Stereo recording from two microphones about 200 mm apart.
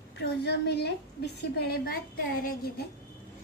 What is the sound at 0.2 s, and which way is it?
A woman's voice, 55° left (ahead or behind).